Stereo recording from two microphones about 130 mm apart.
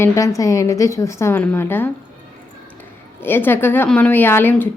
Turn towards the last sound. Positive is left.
turn(degrees=15)  # may be behind; listen again after turning